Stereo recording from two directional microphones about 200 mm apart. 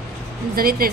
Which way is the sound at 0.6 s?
50° right (ahead or behind).